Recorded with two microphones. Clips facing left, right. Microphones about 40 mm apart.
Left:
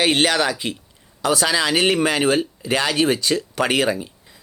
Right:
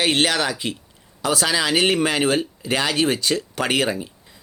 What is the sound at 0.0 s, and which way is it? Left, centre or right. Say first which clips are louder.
Speech: left 2 dB; left.